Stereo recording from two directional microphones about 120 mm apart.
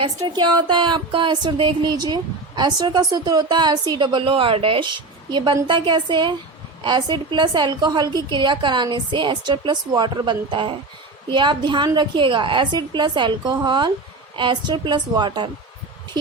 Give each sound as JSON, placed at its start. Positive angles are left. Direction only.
{"t": 0.3, "sound": "speech", "side_deg": -40}